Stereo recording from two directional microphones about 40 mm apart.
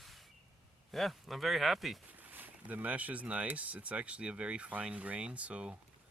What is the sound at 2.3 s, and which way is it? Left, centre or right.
Speech, right.